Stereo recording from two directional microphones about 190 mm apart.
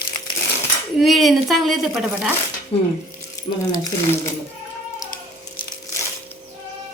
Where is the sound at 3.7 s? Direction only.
15° left (ahead or behind).